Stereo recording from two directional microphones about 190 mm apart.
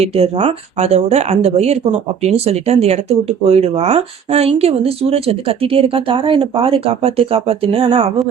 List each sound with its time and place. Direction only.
0.0 s speech: 30° right (ahead or behind)